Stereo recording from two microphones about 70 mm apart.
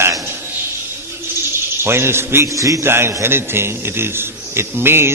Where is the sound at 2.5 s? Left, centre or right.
Right.